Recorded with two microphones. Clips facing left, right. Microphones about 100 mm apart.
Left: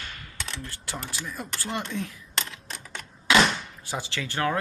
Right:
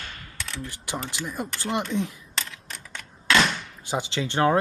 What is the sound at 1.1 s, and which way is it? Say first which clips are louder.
Speech: right 4 dB; 20° right (ahead or behind).